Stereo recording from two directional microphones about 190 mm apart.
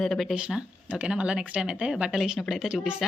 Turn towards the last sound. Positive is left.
turn(degrees=-5)  # may be behind; listen again after turning